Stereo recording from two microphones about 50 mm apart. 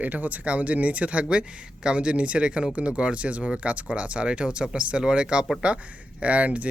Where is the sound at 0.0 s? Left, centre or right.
Right.